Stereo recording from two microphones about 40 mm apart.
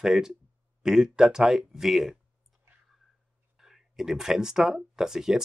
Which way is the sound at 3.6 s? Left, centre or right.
Centre.